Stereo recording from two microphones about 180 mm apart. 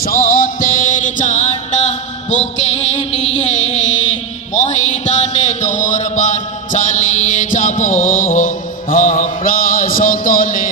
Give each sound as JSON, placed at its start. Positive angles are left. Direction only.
{"t": 0.0, "sound": "music", "side_deg": 55}